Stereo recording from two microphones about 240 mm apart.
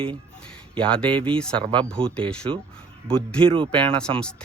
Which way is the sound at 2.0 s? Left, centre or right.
Right.